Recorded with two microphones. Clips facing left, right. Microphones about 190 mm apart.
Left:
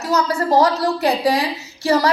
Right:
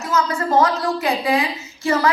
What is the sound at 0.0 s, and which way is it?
A woman's voice, 35° left (ahead or behind).